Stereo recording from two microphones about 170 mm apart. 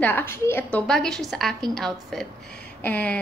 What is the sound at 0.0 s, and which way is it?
A woman's voice, 10° left (ahead or behind).